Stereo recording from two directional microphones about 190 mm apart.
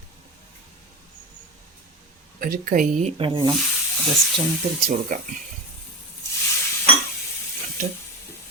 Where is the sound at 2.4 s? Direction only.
50° right (ahead or behind); by 3.5 s 25° right (ahead or behind).